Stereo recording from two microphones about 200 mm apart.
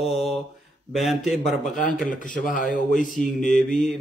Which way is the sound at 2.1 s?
40° left (ahead or behind).